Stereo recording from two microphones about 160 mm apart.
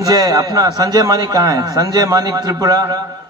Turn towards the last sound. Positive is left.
turn(degrees=-25)  # may be behind; listen again after turning